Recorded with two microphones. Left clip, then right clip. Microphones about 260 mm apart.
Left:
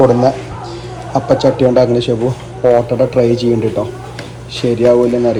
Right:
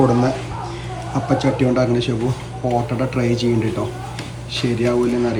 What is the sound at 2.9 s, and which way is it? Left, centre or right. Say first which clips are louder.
Speech: left 9 dB; centre.